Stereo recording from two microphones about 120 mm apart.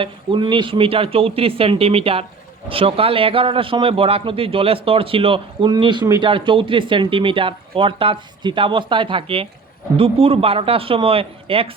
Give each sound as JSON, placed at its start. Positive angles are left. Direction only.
{"t": 0.0, "sound": "a man's voice", "side_deg": -45}